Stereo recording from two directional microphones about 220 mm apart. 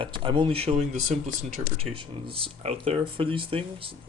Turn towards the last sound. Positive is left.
turn(degrees=-25)  # may be behind; listen again after turning